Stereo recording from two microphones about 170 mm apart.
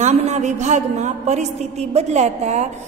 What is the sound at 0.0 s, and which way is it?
A woman's voice, 40° right (ahead or behind).